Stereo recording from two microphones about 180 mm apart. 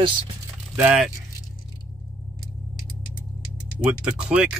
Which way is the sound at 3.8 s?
5° right (ahead or behind).